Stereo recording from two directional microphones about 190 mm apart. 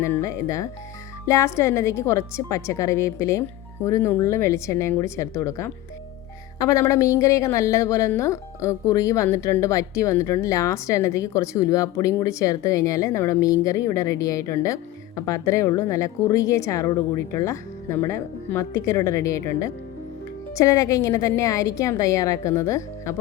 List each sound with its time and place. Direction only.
0.0 s a woman's voice: 15° left (ahead or behind)